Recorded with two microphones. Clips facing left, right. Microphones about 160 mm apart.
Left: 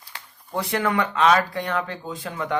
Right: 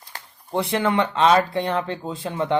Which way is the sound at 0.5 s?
25° right (ahead or behind).